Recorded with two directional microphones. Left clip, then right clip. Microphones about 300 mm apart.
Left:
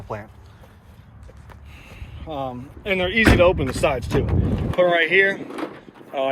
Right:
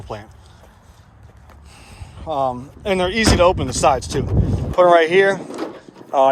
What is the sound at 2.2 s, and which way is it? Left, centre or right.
Speech, centre.